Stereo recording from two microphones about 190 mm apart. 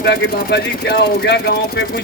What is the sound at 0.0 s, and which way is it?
Speech, 65° left (ahead or behind).